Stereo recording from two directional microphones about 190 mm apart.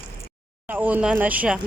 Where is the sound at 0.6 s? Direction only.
10° right (ahead or behind).